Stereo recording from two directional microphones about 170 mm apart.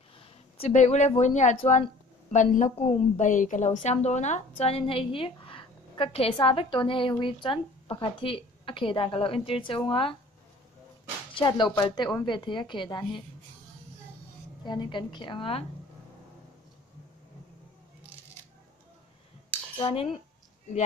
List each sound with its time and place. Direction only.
0.2 s a woman's voice: 35° left (ahead or behind)
11.3 s a woman's voice: 25° left (ahead or behind)
14.6 s a woman's voice: 25° left (ahead or behind)
19.8 s a woman's voice: 30° left (ahead or behind)